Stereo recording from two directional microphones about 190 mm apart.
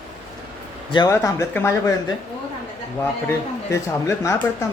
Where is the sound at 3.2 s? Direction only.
15° left (ahead or behind).